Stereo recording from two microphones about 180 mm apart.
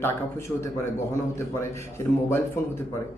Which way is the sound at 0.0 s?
15° left (ahead or behind).